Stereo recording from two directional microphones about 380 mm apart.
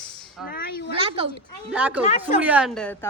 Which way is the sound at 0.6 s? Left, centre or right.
Left.